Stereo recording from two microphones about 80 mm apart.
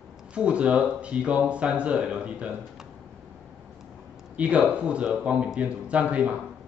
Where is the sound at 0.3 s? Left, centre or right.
Centre.